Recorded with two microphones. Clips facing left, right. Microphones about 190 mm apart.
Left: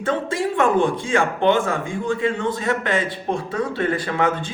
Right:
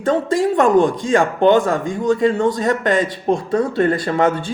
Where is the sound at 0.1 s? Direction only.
45° right (ahead or behind).